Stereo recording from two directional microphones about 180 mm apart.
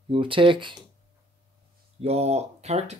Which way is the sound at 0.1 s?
30° right (ahead or behind).